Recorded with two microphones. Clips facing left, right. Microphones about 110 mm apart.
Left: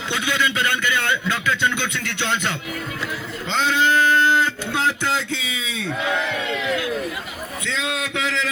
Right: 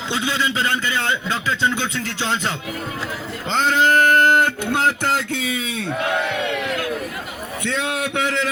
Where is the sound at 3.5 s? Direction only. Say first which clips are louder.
Right 2 dB; 45° right (ahead or behind).